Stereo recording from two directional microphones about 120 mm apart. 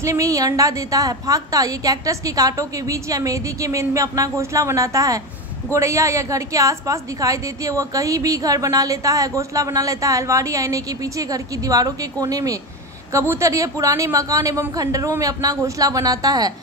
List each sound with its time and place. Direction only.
0.0 s a woman's voice: 25° right (ahead or behind)